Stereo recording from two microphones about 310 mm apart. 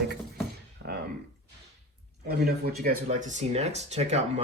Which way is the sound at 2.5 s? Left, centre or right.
Right.